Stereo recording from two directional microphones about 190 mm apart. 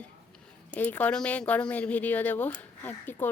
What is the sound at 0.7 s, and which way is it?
A woman's voice, 10° left (ahead or behind).